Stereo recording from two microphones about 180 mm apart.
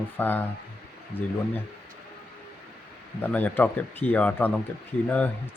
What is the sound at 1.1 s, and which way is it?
Speech, 30° left (ahead or behind).